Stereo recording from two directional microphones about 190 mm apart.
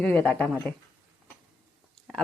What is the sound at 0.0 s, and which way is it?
Speech, 5° left (ahead or behind).